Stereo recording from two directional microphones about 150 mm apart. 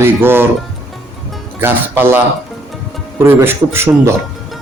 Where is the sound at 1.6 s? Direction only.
15° right (ahead or behind).